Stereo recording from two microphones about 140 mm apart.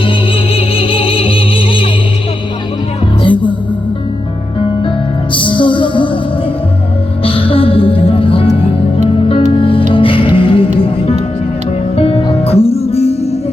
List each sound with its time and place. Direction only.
0.0 s music: 40° left (ahead or behind)
3.2 s music: 35° left (ahead or behind)
4.8 s music: 35° left (ahead or behind)
7.3 s music: 40° left (ahead or behind)